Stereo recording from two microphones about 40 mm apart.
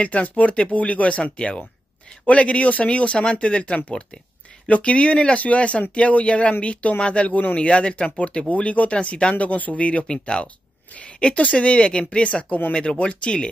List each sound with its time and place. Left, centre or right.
0.0 s speech: left